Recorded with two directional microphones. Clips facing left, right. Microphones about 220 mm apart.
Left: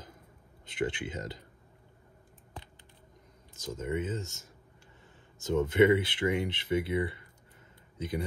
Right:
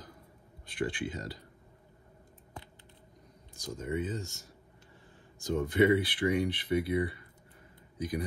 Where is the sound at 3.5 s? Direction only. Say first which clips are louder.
Left 1 dB; 20° left (ahead or behind).